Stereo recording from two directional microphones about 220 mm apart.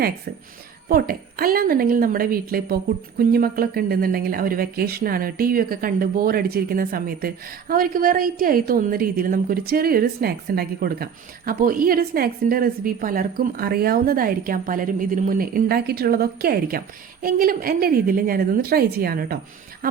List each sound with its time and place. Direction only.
0.9 s speech: 40° right (ahead or behind)